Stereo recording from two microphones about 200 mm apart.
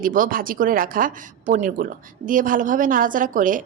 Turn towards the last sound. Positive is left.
turn(degrees=-40)  # may be behind; listen again after turning